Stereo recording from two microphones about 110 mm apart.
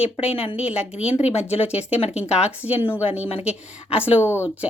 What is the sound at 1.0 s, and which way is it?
Speech, 75° left (ahead or behind).